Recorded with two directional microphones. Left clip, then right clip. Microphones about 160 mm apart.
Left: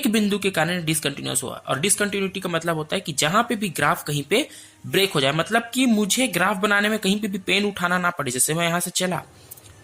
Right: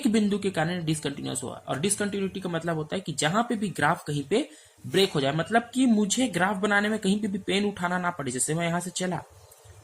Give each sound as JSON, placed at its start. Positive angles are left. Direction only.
{"t": 0.0, "sound": "speech", "side_deg": 20}